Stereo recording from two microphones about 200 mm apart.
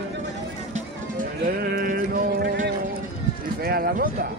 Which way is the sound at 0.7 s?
45° right (ahead or behind).